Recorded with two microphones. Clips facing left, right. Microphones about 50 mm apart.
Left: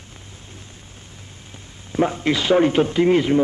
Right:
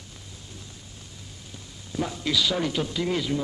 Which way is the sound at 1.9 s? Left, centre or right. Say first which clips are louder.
Left 8 dB; left.